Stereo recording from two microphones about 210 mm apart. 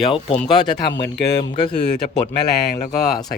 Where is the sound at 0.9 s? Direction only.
55° left (ahead or behind).